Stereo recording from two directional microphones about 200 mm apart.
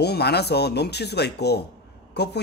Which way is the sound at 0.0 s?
55° left (ahead or behind).